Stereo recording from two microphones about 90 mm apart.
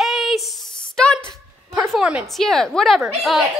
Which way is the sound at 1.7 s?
Centre (ahead or behind).